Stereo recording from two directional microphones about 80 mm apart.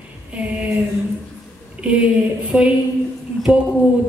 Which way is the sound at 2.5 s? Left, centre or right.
Centre.